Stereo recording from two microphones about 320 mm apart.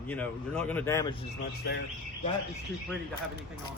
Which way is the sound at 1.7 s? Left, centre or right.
Left.